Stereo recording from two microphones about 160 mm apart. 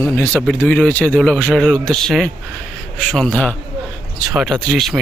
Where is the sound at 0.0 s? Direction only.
15° left (ahead or behind).